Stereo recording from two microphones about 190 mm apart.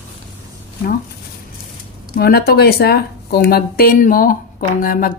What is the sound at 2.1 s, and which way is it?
A woman's voice, 55° left (ahead or behind).